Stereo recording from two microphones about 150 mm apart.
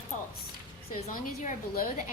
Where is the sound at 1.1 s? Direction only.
70° left (ahead or behind).